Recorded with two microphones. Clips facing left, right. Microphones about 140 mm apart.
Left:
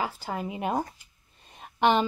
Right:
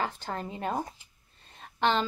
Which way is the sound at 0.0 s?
10° left (ahead or behind).